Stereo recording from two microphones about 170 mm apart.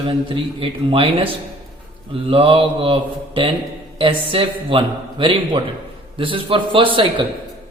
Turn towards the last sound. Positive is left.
turn(degrees=-30)  # may be behind; listen again after turning